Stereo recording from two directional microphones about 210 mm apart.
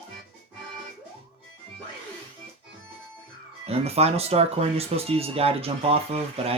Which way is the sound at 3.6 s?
30° right (ahead or behind).